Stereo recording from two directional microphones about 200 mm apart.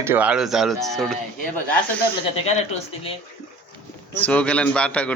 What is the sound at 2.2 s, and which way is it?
Speech, 30° left (ahead or behind).